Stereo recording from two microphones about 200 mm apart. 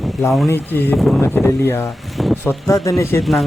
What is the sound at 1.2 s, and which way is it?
Speech, 10° left (ahead or behind).